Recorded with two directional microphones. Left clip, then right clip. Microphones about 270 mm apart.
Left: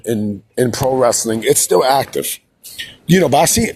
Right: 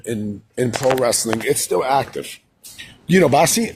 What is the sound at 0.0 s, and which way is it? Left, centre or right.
Speech, centre.